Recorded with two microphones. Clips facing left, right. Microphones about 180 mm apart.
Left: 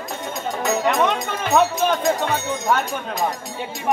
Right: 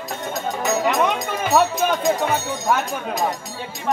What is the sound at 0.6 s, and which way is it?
Speech, centre (ahead or behind).